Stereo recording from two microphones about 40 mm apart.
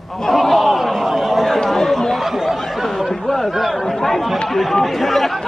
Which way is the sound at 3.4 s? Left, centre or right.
Centre.